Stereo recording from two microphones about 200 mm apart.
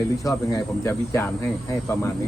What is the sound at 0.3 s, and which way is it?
Speech, 15° left (ahead or behind).